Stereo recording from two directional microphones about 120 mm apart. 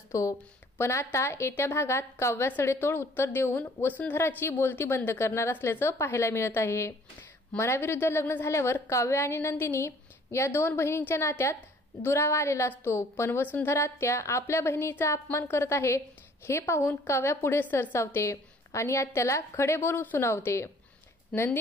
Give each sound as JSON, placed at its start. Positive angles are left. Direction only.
{"t": 0.1, "sound": "a woman's voice", "side_deg": 25}
{"t": 21.3, "sound": "a woman's voice", "side_deg": 5}